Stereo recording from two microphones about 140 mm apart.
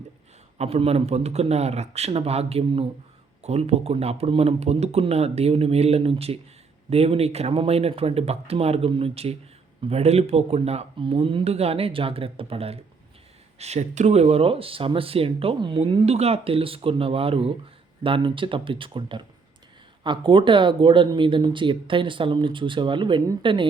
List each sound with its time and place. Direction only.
0.6 s speech: 50° right (ahead or behind)